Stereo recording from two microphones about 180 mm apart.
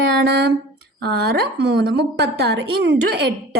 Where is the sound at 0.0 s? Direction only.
65° right (ahead or behind).